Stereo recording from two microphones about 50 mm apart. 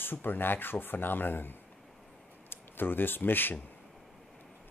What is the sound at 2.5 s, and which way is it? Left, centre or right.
Speech, left.